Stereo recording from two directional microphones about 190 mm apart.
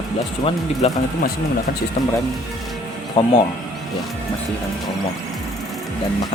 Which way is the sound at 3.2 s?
25° left (ahead or behind).